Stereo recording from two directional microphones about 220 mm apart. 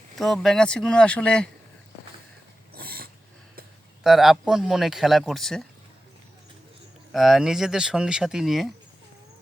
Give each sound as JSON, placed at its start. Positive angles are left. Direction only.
{"t": 0.2, "sound": "speech", "side_deg": 0}
{"t": 2.7, "sound": "a sound", "side_deg": -45}
{"t": 4.0, "sound": "speech", "side_deg": 0}
{"t": 7.1, "sound": "speech", "side_deg": 0}